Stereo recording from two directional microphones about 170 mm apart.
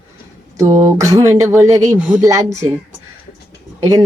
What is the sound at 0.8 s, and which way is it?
Speech, 20° right (ahead or behind).